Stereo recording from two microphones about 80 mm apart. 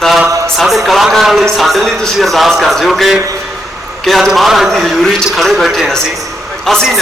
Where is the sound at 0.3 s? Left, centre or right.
Right.